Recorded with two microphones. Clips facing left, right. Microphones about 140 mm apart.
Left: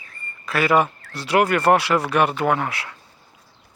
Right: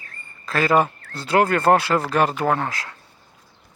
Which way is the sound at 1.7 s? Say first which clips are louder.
Even; 30° right (ahead or behind).